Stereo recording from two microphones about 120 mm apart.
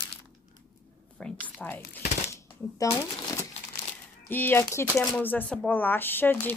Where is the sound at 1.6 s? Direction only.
15° left (ahead or behind).